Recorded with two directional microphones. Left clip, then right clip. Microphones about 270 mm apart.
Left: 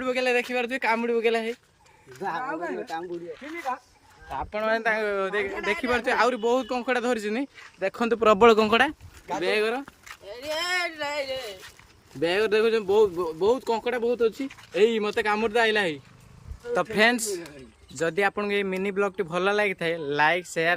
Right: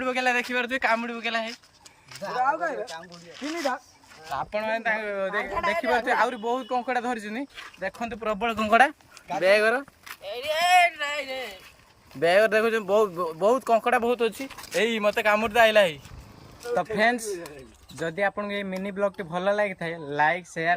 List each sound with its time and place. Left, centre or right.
0.0 s speech: centre
2.5 s speech: right
4.3 s speech: centre
8.2 s speech: left
9.4 s speech: centre
10.6 s a sound: centre
12.2 s speech: centre